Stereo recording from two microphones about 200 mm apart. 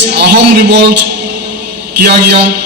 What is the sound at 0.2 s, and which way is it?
Speech, 55° right (ahead or behind).